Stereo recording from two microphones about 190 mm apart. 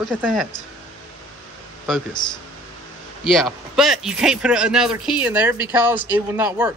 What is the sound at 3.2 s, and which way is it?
Speech, centre (ahead or behind).